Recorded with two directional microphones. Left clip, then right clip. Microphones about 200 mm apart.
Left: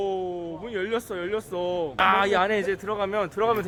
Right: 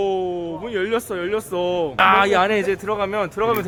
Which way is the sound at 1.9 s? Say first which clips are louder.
Right 6 dB; centre (ahead or behind).